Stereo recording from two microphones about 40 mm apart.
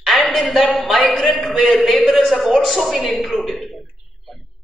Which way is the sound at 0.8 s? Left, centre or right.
Centre.